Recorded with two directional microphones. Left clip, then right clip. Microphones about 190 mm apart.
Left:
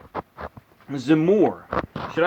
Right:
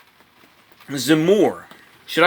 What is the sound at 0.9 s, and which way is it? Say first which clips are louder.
Speech: right 3 dB; 15° right (ahead or behind).